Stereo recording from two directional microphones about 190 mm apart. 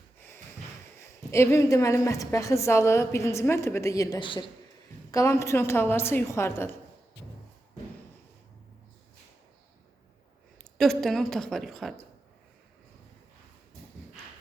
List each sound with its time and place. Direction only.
0.9 s a woman's voice: 15° left (ahead or behind)
10.6 s a woman's voice: centre (ahead or behind)